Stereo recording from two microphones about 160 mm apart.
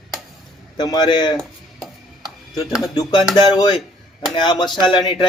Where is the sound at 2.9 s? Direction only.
30° left (ahead or behind).